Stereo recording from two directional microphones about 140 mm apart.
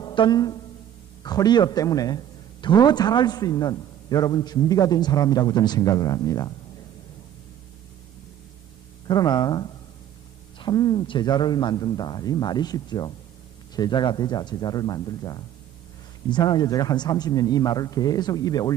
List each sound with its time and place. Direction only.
0.0 s music: 30° left (ahead or behind)
1.2 s a man's voice: 30° left (ahead or behind)
9.0 s a man's voice: 30° left (ahead or behind)